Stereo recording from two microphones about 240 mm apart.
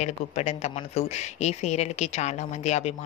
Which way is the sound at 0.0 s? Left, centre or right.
Left.